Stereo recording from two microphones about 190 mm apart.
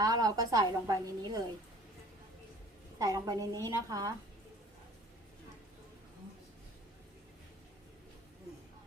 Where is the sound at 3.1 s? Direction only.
15° right (ahead or behind).